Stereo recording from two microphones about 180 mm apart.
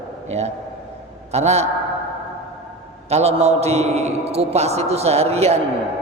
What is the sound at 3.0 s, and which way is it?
A man's voice, 35° right (ahead or behind).